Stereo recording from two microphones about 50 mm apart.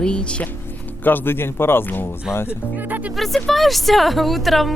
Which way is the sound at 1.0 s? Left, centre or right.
Left.